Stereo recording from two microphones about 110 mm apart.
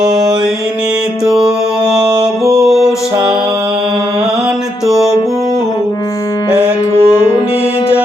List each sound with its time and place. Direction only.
1.2 s music: 5° right (ahead or behind)
4.9 s music: centre (ahead or behind)
6.6 s music: 25° left (ahead or behind)